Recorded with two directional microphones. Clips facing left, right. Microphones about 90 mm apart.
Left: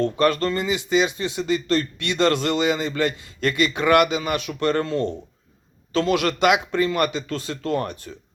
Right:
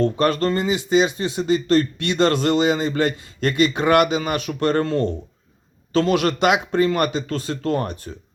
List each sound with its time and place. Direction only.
0.0 s speech: 35° right (ahead or behind)